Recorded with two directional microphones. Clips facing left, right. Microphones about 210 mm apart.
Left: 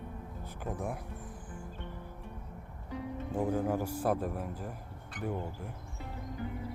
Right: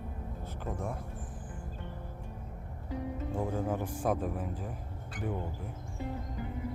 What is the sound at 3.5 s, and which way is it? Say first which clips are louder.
A man's voice: left 2 dB; 5° left (ahead or behind).